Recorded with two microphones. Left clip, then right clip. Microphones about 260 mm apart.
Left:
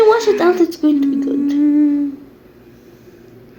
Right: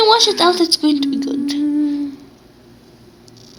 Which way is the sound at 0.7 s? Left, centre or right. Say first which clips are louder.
Even; centre.